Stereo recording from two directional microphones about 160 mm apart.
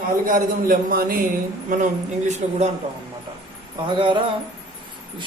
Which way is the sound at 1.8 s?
45° right (ahead or behind).